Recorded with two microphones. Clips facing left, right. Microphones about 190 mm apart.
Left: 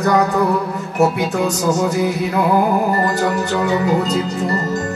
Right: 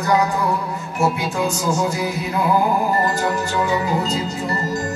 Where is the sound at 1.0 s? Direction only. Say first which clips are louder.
Left 4 dB; 65° left (ahead or behind).